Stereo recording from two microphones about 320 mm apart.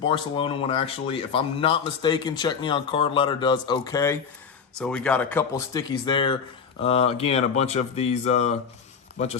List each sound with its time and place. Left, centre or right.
0.0 s a man's voice: centre